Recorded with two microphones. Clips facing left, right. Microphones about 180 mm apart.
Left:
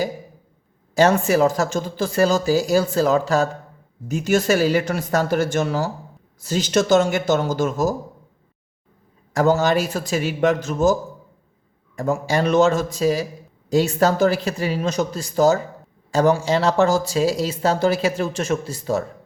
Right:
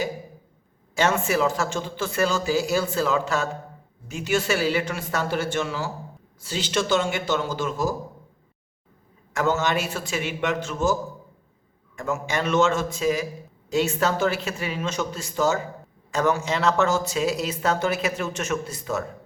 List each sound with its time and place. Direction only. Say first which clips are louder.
0.9 s speech: left 6 dB; 40° left (ahead or behind)
9.3 s speech: left 6 dB; 35° left (ahead or behind)
11.9 s speech: left 6 dB; 35° left (ahead or behind)